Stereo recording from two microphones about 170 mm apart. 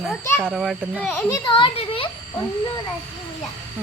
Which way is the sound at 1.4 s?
30° left (ahead or behind).